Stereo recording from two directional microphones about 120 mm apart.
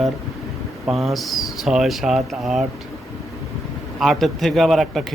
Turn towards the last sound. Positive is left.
turn(degrees=0)  # may be behind; listen again after turning